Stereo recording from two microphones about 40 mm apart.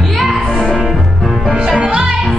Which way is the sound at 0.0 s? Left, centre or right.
Centre.